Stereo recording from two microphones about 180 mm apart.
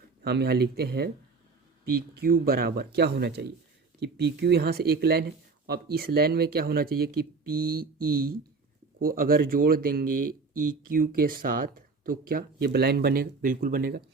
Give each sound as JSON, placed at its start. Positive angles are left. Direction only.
{"t": 0.2, "sound": "speech", "side_deg": -65}
{"t": 2.1, "sound": "speech", "side_deg": -55}